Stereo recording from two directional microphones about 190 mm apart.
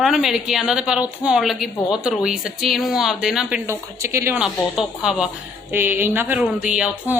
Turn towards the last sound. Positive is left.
turn(degrees=-5)  # may be behind; listen again after turning